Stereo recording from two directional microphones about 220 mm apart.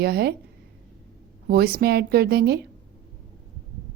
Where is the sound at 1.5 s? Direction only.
45° right (ahead or behind).